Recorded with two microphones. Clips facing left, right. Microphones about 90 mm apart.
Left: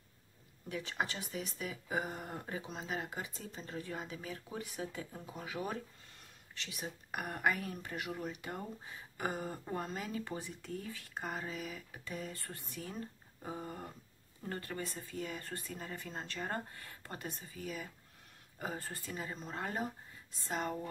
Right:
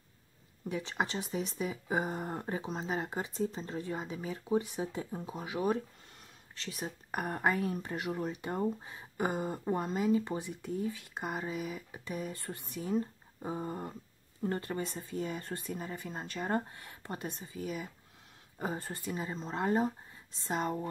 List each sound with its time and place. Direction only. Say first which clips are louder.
0.7 s speech: right 4 dB; 25° right (ahead or behind)
6.5 s speech: right 4 dB; 35° right (ahead or behind)